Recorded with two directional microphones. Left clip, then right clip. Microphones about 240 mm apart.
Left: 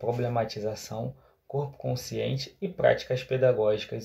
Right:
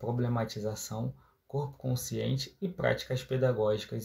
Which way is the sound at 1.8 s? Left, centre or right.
Right.